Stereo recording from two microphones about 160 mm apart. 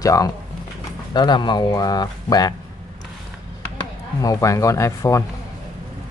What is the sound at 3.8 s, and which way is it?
Speech, 20° left (ahead or behind).